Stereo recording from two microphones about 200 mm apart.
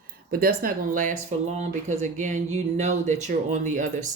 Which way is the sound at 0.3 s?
50° right (ahead or behind).